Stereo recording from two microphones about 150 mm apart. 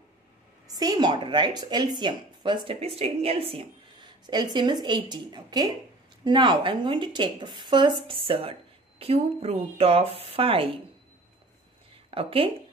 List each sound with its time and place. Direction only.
0.7 s speech: 25° right (ahead or behind)
12.1 s speech: 40° right (ahead or behind)